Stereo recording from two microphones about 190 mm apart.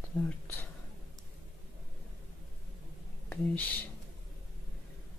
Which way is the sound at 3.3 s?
10° left (ahead or behind).